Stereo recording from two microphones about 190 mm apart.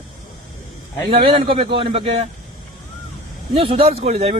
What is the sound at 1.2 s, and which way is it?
A man's voice, 30° right (ahead or behind).